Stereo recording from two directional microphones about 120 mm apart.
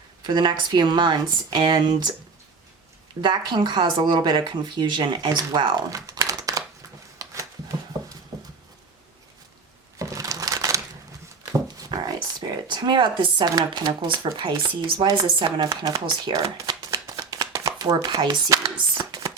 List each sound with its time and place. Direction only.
0.3 s speech: 40° right (ahead or behind)
3.2 s speech: 40° right (ahead or behind)
7.2 s a sound: 30° right (ahead or behind)
8.3 s horse: 30° right (ahead or behind)
10.0 s crumpling: 25° right (ahead or behind)
11.8 s speech: 35° right (ahead or behind)